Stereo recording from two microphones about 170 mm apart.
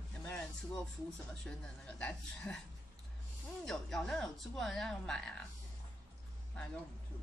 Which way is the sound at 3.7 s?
Centre (ahead or behind).